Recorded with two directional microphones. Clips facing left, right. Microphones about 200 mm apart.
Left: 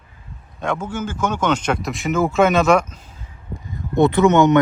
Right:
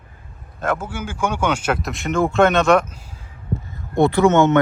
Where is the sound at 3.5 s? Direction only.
15° left (ahead or behind).